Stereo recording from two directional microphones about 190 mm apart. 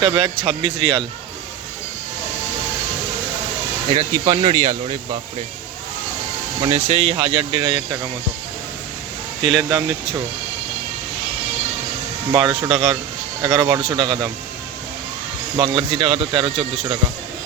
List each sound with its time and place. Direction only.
0.0 s speech: 25° right (ahead or behind)
4.1 s speech: 20° right (ahead or behind)
6.6 s speech: 35° right (ahead or behind)
9.4 s speech: 25° right (ahead or behind)
12.3 s speech: 25° right (ahead or behind)
15.5 s speech: 25° right (ahead or behind)